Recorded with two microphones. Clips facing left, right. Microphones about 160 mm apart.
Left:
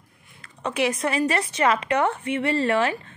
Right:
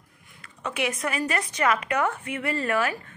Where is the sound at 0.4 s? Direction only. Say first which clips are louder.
Left 5 dB; 35° left (ahead or behind).